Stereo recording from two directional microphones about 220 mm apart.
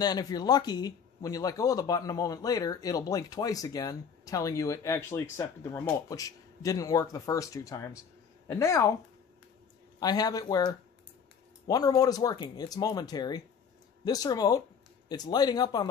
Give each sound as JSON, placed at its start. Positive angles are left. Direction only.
{"t": 0.0, "sound": "speech", "side_deg": 20}
{"t": 9.9, "sound": "speech", "side_deg": 15}